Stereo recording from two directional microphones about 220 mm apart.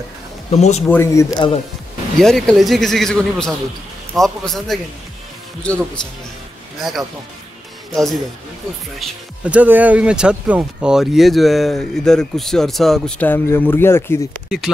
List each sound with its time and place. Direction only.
0.5 s speech: 30° left (ahead or behind)
0.8 s speech: 10° left (ahead or behind)
2.1 s speech: centre (ahead or behind)
14.5 s speech: 5° right (ahead or behind)